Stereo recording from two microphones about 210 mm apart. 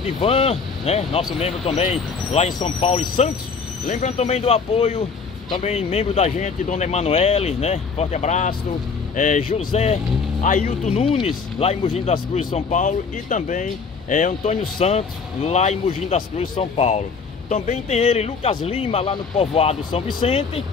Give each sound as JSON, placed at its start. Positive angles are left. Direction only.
{"t": 0.0, "sound": "speech", "side_deg": 25}